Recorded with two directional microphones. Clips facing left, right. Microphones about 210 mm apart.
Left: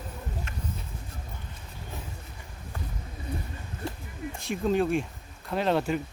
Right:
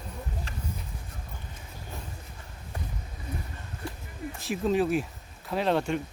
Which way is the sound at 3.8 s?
25° left (ahead or behind).